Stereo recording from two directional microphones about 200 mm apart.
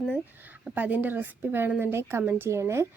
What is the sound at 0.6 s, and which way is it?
A woman's voice, 10° right (ahead or behind).